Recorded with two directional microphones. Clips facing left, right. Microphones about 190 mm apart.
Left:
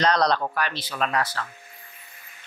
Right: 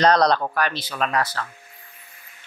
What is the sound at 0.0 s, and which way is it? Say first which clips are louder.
Speech: right 4 dB; 40° right (ahead or behind).